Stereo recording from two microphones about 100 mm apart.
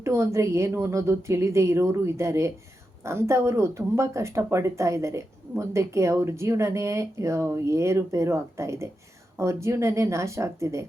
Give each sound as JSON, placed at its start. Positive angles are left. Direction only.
{"t": 0.0, "sound": "speech", "side_deg": -30}